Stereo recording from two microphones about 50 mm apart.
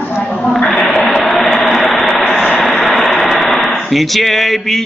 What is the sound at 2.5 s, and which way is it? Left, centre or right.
Vehicle, centre.